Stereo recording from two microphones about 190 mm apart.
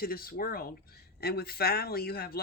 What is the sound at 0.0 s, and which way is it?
Speech, 50° left (ahead or behind).